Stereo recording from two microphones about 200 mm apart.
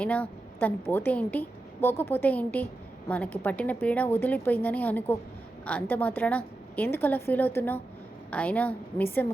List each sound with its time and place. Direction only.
0.0 s a woman's voice: 5° left (ahead or behind)